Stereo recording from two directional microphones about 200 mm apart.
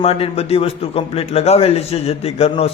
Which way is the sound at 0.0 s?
30° left (ahead or behind).